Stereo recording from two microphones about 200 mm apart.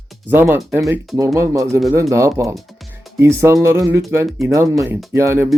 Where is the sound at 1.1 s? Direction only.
15° right (ahead or behind).